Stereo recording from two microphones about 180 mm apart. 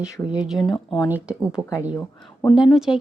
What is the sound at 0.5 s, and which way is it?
Speech, 25° left (ahead or behind).